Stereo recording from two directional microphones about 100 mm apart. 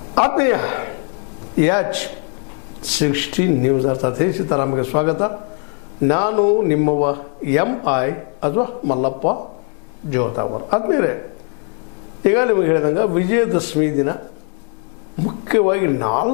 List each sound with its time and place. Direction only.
0.1 s a man's voice: 20° left (ahead or behind)
3.1 s a man's voice: 20° left (ahead or behind)
15.2 s a man's voice: 20° left (ahead or behind)